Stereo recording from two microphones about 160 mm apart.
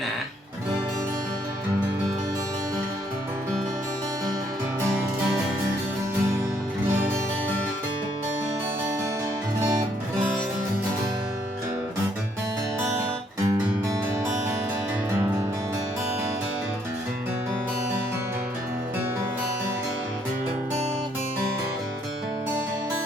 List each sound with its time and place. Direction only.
9.6 s music: 20° right (ahead or behind)
12.8 s guitar: 20° right (ahead or behind)